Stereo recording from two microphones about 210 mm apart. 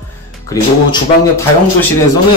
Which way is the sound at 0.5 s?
15° left (ahead or behind).